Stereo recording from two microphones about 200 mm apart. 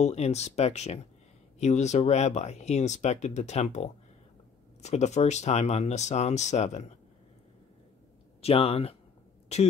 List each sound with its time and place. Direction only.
0.0 s speech: 35° left (ahead or behind)
8.4 s speech: 30° left (ahead or behind)